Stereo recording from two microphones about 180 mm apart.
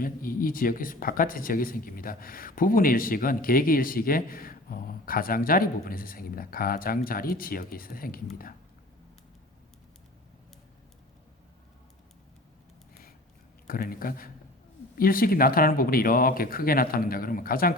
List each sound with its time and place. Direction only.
0.0 s speech: 50° left (ahead or behind)
13.7 s speech: 55° left (ahead or behind)